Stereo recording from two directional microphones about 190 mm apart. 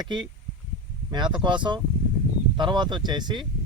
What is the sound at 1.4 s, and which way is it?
Speech, 25° right (ahead or behind).